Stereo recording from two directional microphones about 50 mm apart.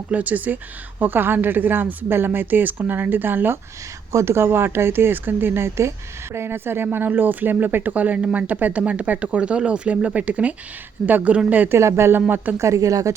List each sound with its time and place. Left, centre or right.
0.1 s speech: right
4.1 s speech: right
6.8 s speech: right
11.7 s speech: right
12.5 s speech: right